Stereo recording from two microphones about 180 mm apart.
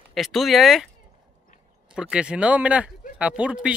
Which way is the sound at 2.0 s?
5° right (ahead or behind).